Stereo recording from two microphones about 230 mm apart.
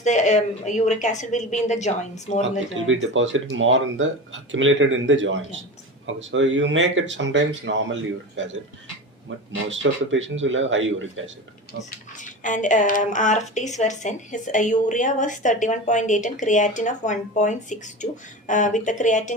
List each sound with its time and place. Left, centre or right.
0.0 s speech: left
2.7 s speech: right
9.6 s speech: right
11.8 s speech: left